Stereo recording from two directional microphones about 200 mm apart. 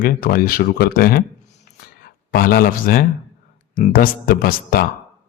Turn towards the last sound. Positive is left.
turn(degrees=50)  # may be behind; listen again after turning